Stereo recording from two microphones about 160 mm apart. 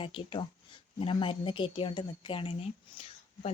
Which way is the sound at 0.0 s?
35° left (ahead or behind).